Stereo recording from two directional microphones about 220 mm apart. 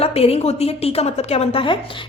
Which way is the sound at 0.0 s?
25° left (ahead or behind).